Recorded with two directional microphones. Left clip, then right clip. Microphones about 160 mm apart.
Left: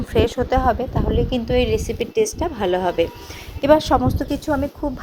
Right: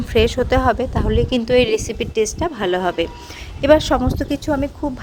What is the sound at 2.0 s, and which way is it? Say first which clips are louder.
A woman's voice: right 1 dB; 10° right (ahead or behind).